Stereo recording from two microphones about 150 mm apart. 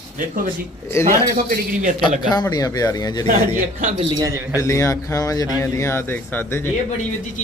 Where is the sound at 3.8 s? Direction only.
35° right (ahead or behind).